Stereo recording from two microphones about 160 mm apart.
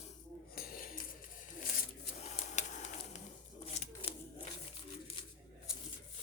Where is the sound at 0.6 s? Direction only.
65° left (ahead or behind).